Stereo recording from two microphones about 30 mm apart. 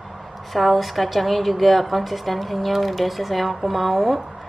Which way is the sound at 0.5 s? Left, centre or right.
Centre.